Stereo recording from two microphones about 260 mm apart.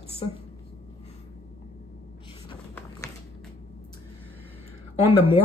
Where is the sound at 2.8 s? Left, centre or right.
Centre.